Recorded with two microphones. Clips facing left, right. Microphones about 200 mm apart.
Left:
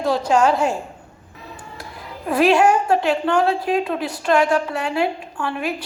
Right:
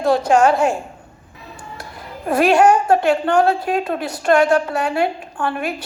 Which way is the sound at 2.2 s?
50° right (ahead or behind).